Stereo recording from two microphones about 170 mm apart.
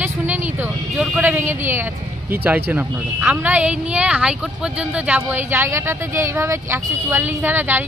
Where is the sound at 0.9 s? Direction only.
5° right (ahead or behind).